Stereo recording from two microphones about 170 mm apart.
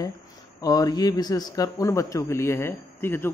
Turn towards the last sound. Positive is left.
turn(degrees=15)  # may be behind; listen again after turning